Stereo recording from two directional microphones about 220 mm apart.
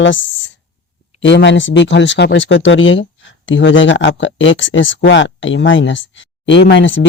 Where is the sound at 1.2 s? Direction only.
55° left (ahead or behind).